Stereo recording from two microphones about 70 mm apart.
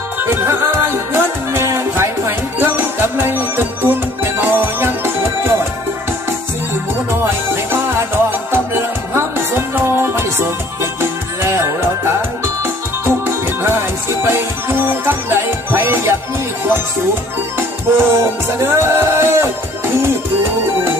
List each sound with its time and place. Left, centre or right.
0.2 s music: right
7.5 s music: right
13.2 s music: right
17.6 s music: right